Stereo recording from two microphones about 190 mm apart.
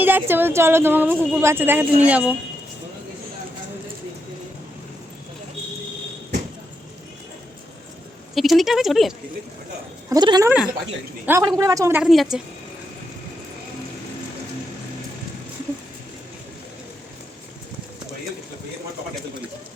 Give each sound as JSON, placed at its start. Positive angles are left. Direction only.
{"t": 0.0, "sound": "a woman's voice", "side_deg": -10}
{"t": 8.4, "sound": "speech", "side_deg": 0}
{"t": 10.1, "sound": "a woman's voice", "side_deg": -20}
{"t": 12.0, "sound": "speech", "side_deg": 0}